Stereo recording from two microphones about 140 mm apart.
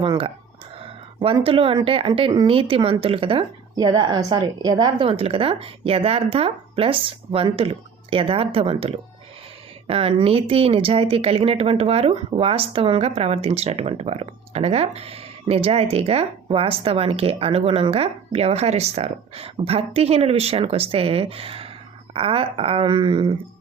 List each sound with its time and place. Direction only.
0.0 s a woman's voice: 35° right (ahead or behind)